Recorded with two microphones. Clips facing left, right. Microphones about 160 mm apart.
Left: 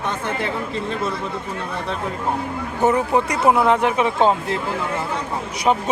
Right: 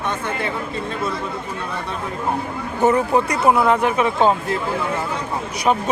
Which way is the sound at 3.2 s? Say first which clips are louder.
Even; 20° left (ahead or behind).